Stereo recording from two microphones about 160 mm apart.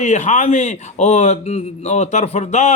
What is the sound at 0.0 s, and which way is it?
A man's voice, 45° left (ahead or behind).